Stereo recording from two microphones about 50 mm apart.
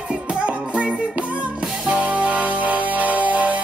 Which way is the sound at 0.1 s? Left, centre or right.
Right.